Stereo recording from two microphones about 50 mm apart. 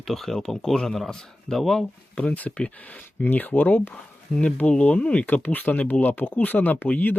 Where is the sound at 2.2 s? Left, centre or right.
Left.